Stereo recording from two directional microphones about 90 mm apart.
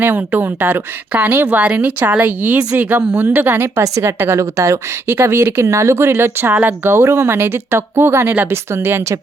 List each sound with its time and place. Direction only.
0.0 s a woman's voice: 20° right (ahead or behind)